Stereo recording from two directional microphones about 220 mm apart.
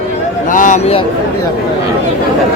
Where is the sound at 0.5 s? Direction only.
35° left (ahead or behind).